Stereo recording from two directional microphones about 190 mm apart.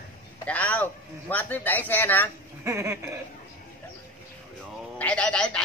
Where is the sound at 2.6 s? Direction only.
15° right (ahead or behind).